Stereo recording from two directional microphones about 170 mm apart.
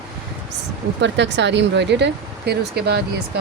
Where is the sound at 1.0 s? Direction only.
90° right.